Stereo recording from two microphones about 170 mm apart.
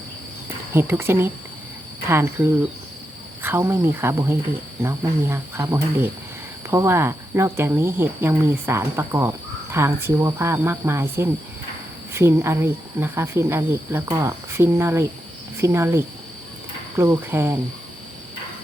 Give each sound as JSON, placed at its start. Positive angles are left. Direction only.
{"t": 0.7, "sound": "speech", "side_deg": -15}
{"t": 3.4, "sound": "speech", "side_deg": -15}